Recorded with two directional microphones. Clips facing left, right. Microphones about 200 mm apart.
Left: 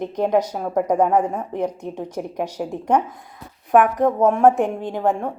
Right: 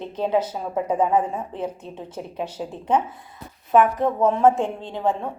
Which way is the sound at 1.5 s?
15° left (ahead or behind).